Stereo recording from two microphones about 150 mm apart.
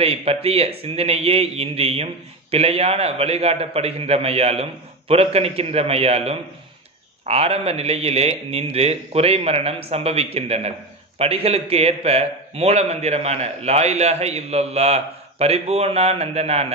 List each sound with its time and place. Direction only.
0.0 s a man's voice: 40° right (ahead or behind)